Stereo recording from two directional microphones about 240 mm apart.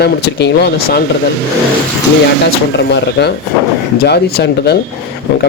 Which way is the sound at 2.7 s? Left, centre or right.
Left.